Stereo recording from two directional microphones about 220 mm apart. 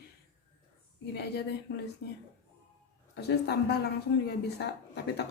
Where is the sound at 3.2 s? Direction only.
50° left (ahead or behind).